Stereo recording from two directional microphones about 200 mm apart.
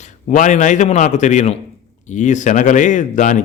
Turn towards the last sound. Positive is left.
turn(degrees=40)  # may be behind; listen again after turning